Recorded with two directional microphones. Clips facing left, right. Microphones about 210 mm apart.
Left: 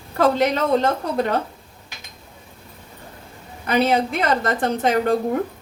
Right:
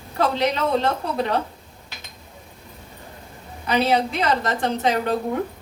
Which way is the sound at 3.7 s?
50° left (ahead or behind).